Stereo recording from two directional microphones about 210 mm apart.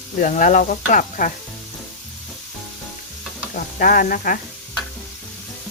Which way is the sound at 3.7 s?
40° left (ahead or behind).